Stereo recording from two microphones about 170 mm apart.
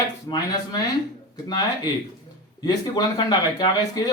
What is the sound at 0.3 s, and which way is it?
Speech, 25° left (ahead or behind).